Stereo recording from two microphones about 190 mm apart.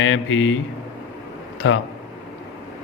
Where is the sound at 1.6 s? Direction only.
80° left.